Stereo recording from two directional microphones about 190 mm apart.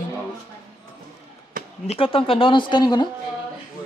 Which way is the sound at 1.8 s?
30° left (ahead or behind).